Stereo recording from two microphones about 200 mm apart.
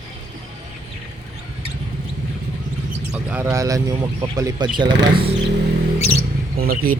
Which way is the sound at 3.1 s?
10° right (ahead or behind).